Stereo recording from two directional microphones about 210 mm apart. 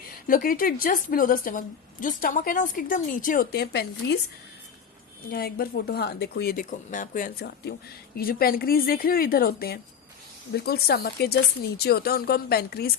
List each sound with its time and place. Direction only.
0.1 s a woman's voice: 40° left (ahead or behind)
5.3 s speech: 45° left (ahead or behind)